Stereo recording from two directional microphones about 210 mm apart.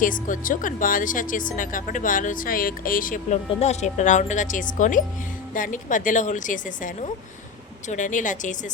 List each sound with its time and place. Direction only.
0.0 s speech: 40° left (ahead or behind)